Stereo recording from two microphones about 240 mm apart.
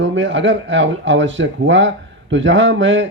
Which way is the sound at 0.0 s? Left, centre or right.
Right.